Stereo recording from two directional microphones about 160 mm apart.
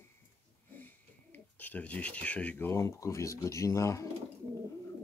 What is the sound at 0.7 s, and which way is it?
Speech, 10° left (ahead or behind).